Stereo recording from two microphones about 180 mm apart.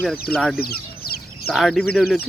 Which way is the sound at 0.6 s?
60° left (ahead or behind).